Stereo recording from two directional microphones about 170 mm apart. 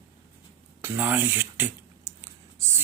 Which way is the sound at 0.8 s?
10° right (ahead or behind).